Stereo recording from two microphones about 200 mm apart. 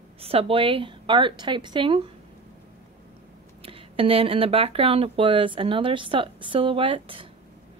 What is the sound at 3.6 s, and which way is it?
A woman's voice, 25° right (ahead or behind).